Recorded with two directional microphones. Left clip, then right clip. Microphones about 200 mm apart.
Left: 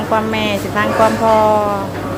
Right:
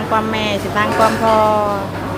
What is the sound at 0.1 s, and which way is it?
Speech, 5° left (ahead or behind).